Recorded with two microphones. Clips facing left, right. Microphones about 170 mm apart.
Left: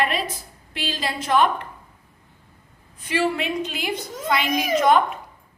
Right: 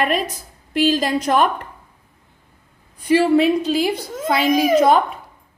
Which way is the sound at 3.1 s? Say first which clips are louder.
Right 9 dB; 35° right (ahead or behind).